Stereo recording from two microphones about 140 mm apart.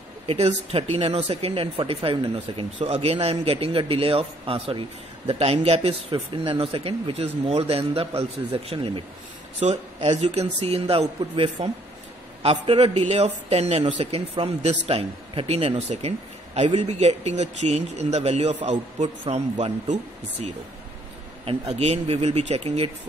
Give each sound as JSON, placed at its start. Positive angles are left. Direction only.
{"t": 0.3, "sound": "a man's voice", "side_deg": -45}
{"t": 9.6, "sound": "a man's voice", "side_deg": -55}
{"t": 17.0, "sound": "a man's voice", "side_deg": -50}
{"t": 21.5, "sound": "a man's voice", "side_deg": -45}